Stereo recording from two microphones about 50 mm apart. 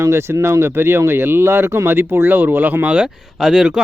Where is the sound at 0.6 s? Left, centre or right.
Right.